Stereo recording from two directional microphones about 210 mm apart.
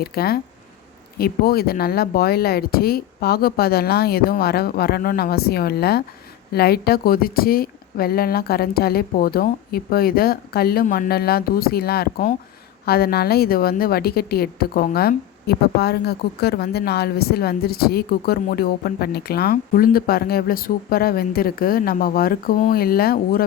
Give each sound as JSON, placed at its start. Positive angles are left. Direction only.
{"t": 0.0, "sound": "a woman's voice", "side_deg": 45}